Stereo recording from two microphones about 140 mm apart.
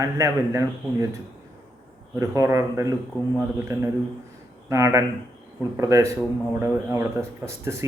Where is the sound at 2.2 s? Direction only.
20° right (ahead or behind).